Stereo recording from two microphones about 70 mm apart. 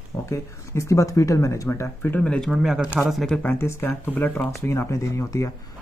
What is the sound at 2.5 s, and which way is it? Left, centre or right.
Speech, centre.